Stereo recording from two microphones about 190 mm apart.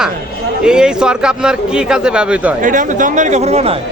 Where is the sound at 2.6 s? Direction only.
45° right (ahead or behind).